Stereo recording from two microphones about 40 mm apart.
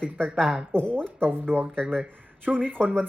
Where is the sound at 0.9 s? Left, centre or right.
Right.